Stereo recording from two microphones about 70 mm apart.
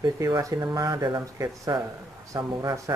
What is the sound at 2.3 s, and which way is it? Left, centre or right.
Speech, right.